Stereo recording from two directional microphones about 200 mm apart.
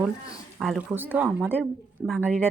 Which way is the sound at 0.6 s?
Centre (ahead or behind).